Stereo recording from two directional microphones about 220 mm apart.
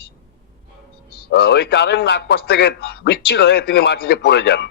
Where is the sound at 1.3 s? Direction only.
50° left (ahead or behind).